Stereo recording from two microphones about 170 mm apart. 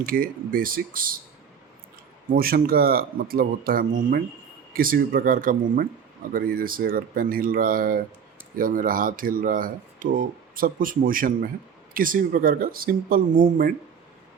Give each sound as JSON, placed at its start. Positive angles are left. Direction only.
{"t": 0.0, "sound": "speech", "side_deg": -55}
{"t": 2.3, "sound": "speech", "side_deg": -60}